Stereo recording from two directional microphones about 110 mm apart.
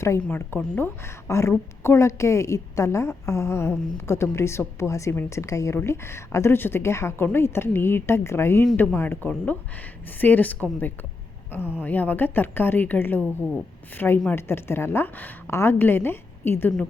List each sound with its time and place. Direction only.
0.2 s a woman's voice: 15° left (ahead or behind)